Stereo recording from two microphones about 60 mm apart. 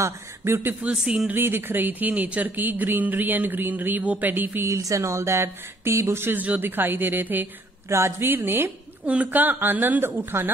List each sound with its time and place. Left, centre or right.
0.0 s speech: right
0.9 s speech: centre
1.3 s speech: right
4.6 s speech: right
6.3 s speech: right
7.9 s speech: right
9.0 s speech: right